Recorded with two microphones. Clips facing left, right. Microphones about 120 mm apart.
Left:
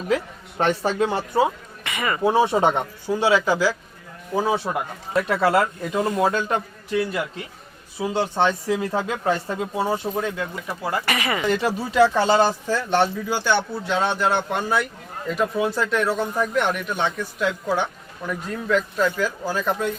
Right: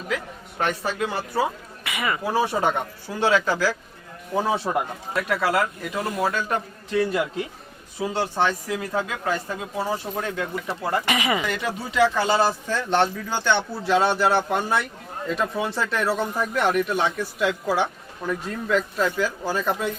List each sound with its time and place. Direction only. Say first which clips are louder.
0.6 s speech: left 4 dB; 30° left (ahead or behind)
1.8 s a sound: left 1 dB; 5° right (ahead or behind)
2.2 s speech: left 5 dB; 25° left (ahead or behind)
4.4 s speech: left 1 dB; centre (ahead or behind)
5.3 s speech: left 3 dB; 30° left (ahead or behind)
6.9 s speech: right 1 dB; centre (ahead or behind)
8.0 s speech: left 2 dB; 15° left (ahead or behind)
10.2 s speech: left 2 dB; 5° left (ahead or behind)
11.0 s speech: right 1 dB; 15° right (ahead or behind)
11.4 s speech: left 5 dB; 30° left (ahead or behind)
12.6 s speech: left 1 dB; 10° left (ahead or behind)
13.8 s speech: right 5 dB; 5° right (ahead or behind)